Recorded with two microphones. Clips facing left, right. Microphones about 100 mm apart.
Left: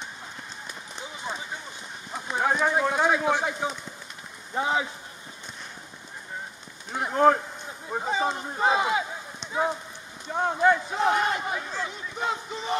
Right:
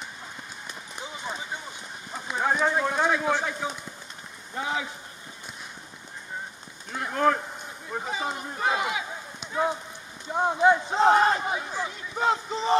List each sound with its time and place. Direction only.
2.3 s a sound: 10° left (ahead or behind)
3.2 s speech: 15° left (ahead or behind)
4.6 s speech: 30° left (ahead or behind)
6.9 s speech: 25° left (ahead or behind)
10.3 s speech: 15° right (ahead or behind)
11.0 s speech: 35° right (ahead or behind)
11.4 s speech: 15° right (ahead or behind)
12.2 s speech: 35° right (ahead or behind)